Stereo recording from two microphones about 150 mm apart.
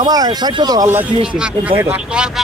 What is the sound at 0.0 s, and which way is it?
Speech, 25° right (ahead or behind).